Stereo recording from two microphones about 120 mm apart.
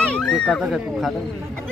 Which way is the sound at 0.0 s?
5° left (ahead or behind).